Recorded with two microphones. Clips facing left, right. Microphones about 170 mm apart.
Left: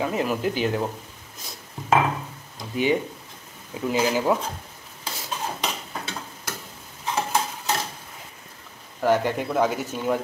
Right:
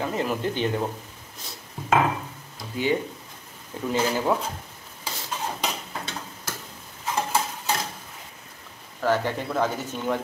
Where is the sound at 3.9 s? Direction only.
5° left (ahead or behind).